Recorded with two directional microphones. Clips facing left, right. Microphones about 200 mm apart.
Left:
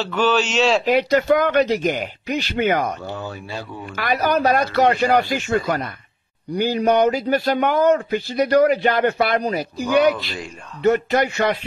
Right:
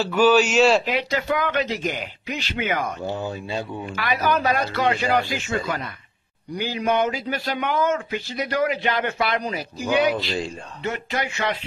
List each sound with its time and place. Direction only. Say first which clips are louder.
0.0 s speech: right 2 dB; 10° right (ahead or behind)
0.8 s speech: left 8 dB; 45° left (ahead or behind)
3.0 s speech: right 2 dB; 20° right (ahead or behind)
3.9 s speech: left 3 dB; 45° left (ahead or behind)